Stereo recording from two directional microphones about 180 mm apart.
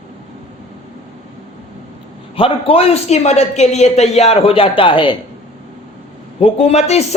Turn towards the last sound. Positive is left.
turn(degrees=35)  # may be behind; listen again after turning